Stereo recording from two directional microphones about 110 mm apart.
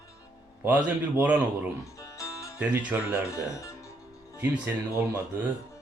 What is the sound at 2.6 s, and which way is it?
Speech, 15° right (ahead or behind).